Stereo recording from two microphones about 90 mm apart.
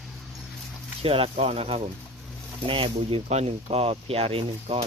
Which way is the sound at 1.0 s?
90° right.